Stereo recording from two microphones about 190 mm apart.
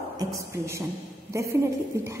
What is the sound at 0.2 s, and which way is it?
A woman's voice, 15° right (ahead or behind).